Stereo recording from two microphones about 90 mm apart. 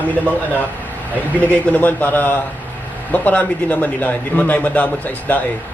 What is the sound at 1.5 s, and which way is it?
A man's voice, 20° left (ahead or behind).